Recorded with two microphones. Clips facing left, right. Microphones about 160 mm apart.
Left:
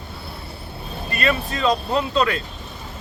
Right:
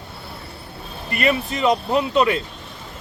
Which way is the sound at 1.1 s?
20° right (ahead or behind).